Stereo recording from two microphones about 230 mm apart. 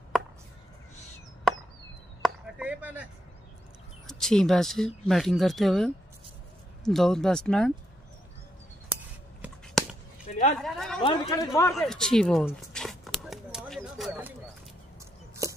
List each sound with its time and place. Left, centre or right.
1.5 s chop: centre
2.2 s a sound: centre
4.1 s speech: centre
9.8 s chop: centre
10.6 s speech: centre
11.0 s a man's voice: centre
11.7 s a sound: centre
15.4 s chopping: centre